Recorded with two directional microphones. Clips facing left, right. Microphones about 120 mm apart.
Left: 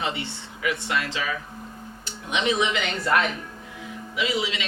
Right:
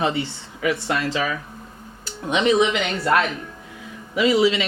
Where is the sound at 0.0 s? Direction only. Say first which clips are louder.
Right 6 dB; 35° right (ahead or behind).